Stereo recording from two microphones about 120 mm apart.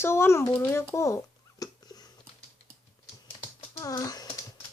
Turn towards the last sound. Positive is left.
turn(degrees=30)  # may be behind; listen again after turning